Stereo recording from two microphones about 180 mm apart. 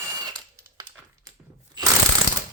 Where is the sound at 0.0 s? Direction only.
20° right (ahead or behind).